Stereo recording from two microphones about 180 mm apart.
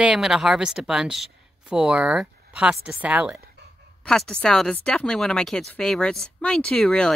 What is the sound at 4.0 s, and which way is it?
Speech, 5° left (ahead or behind).